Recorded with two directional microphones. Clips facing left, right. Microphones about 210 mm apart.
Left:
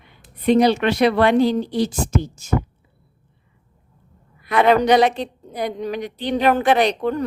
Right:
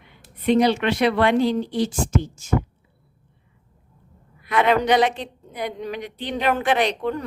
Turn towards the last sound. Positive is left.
turn(degrees=40)  # may be behind; listen again after turning